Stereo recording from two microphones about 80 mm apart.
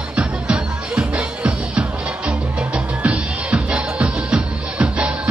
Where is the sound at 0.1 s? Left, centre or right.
Centre.